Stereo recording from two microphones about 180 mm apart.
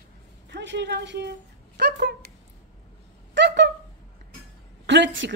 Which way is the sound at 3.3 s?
80° right.